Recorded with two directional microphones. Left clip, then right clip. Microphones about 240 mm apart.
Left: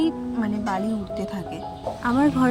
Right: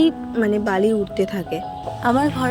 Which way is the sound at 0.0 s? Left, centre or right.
Centre.